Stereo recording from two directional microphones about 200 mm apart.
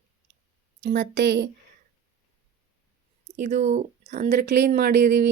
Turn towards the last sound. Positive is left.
turn(degrees=-50)  # may be behind; listen again after turning